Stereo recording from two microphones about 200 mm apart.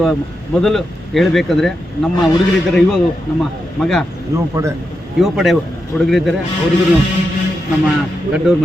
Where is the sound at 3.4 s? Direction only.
Centre (ahead or behind).